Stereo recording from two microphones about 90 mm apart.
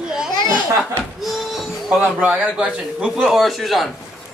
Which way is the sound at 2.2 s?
20° right (ahead or behind).